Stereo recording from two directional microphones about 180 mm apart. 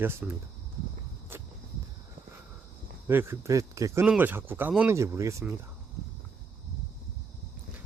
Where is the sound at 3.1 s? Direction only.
15° right (ahead or behind).